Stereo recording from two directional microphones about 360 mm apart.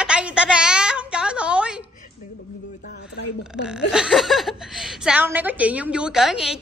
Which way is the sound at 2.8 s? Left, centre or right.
Left.